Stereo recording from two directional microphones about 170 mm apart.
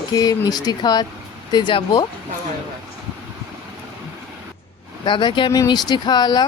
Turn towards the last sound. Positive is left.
turn(degrees=25)  # may be behind; listen again after turning